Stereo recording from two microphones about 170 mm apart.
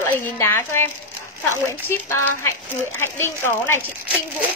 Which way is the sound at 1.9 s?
15° left (ahead or behind).